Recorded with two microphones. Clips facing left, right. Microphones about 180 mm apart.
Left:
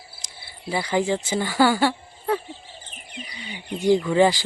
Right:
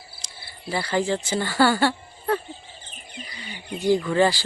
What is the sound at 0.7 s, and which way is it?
Speech, 15° left (ahead or behind).